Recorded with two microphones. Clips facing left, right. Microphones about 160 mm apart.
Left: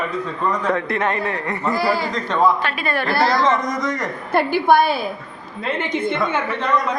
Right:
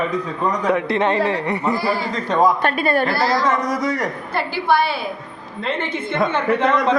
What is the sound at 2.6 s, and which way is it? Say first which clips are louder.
Speech: right 5 dB; 40° right (ahead or behind).